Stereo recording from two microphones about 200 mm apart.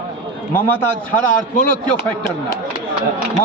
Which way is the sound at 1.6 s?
45° left (ahead or behind).